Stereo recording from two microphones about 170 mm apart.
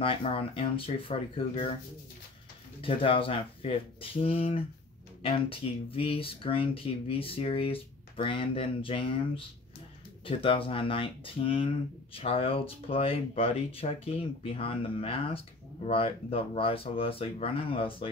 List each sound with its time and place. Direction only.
0.0 s speech: 35° left (ahead or behind)
2.8 s speech: 30° left (ahead or behind)